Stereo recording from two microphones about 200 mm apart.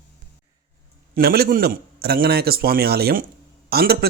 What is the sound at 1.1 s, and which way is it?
Speech, 50° right (ahead or behind).